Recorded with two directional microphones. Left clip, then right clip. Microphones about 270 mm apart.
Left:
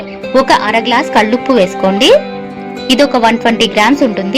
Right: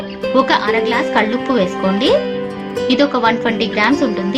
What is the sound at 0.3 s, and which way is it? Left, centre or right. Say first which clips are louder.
A woman's voice: left 5 dB; left.